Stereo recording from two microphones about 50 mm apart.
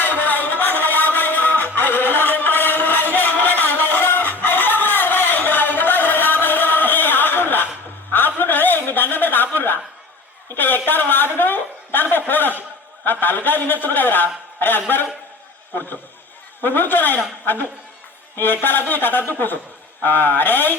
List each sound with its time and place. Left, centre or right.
0.0 s music: left
8.4 s chuckle: left
12.3 s a sound: left
13.1 s a man's voice: left
16.6 s a man's voice: left